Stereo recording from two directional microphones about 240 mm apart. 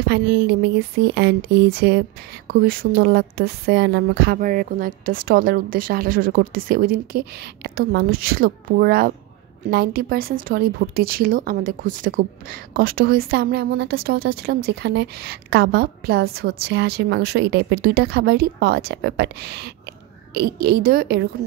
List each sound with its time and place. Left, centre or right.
0.1 s speech: right